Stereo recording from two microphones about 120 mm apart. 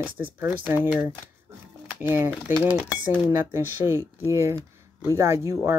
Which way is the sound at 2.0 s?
20° right (ahead or behind).